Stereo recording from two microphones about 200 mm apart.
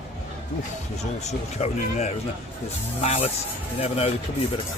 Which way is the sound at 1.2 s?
35° left (ahead or behind).